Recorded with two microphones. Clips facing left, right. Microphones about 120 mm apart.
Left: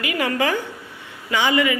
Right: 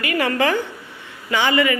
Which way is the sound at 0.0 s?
10° left (ahead or behind).